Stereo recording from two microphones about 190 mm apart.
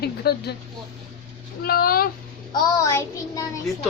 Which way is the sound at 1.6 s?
50° left (ahead or behind).